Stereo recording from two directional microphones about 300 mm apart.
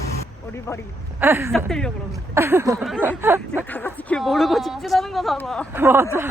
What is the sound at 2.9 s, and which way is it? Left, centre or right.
Speech, centre.